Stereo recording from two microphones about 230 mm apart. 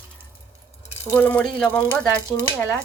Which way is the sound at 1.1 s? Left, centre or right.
Centre.